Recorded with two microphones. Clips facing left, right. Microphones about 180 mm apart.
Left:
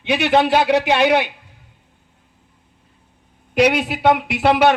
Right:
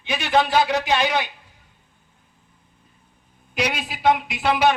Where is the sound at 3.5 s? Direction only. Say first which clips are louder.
Left 10 dB; 65° left (ahead or behind).